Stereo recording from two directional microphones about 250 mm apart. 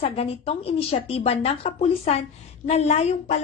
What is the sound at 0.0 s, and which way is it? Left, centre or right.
A woman's voice, left.